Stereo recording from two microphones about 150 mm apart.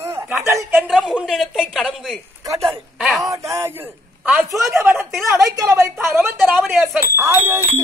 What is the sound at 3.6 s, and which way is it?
Speech, 15° right (ahead or behind).